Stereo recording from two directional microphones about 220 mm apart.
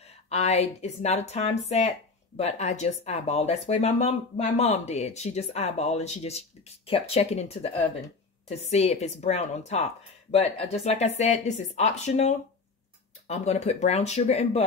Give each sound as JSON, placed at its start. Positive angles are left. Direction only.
{"t": 0.3, "sound": "speech", "side_deg": 30}